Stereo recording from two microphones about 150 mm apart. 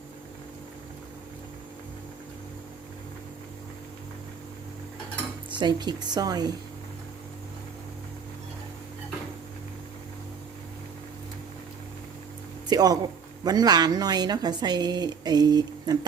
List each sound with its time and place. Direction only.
5.5 s a woman's voice: 30° right (ahead or behind)
12.6 s a woman's voice: 25° right (ahead or behind)